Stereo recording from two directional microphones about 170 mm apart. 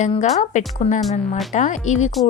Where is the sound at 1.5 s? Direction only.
45° left (ahead or behind).